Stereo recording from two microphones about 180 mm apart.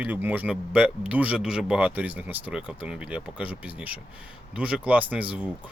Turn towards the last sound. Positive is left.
turn(degrees=-5)  # may be behind; listen again after turning